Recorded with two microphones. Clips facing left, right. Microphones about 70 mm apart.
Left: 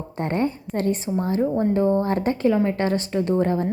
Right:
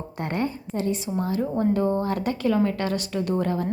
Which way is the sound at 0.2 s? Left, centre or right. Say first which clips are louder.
Left 4 dB; left.